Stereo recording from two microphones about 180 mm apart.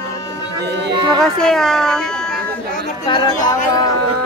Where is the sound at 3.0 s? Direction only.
20° left (ahead or behind).